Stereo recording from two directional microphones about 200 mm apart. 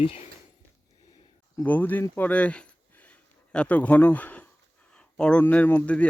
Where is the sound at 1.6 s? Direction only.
10° left (ahead or behind).